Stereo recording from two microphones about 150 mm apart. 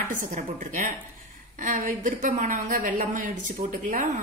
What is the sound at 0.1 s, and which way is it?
Speech, 60° right (ahead or behind).